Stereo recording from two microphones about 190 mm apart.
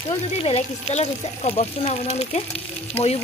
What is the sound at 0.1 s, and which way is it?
Speech, 35° left (ahead or behind).